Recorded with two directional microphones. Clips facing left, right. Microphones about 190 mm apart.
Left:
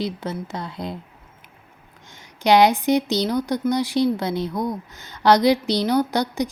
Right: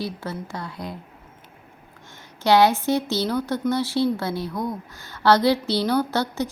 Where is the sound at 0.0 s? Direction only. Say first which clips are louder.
Left 3 dB; 20° left (ahead or behind).